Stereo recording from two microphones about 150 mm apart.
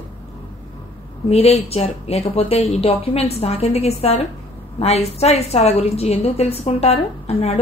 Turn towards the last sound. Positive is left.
turn(degrees=40)  # may be behind; listen again after turning